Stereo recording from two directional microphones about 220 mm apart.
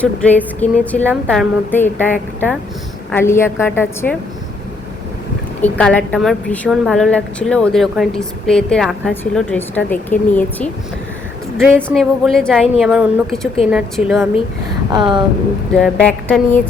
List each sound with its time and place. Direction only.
0.0 s a woman's voice: 5° left (ahead or behind)
5.6 s a woman's voice: 5° left (ahead or behind)
14.9 s speech: 20° right (ahead or behind)
15.7 s a woman's voice: 5° left (ahead or behind)